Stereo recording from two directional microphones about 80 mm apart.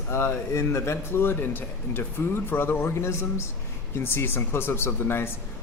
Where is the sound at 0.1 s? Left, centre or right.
Left.